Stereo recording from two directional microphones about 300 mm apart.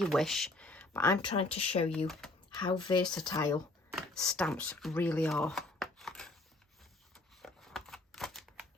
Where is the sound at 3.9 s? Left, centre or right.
Centre.